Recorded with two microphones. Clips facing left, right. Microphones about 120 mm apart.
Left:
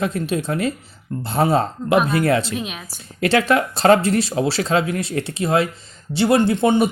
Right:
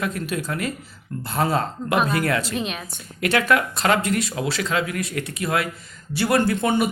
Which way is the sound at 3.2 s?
30° left (ahead or behind).